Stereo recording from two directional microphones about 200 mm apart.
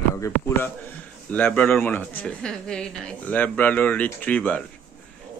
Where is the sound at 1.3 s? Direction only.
5° left (ahead or behind).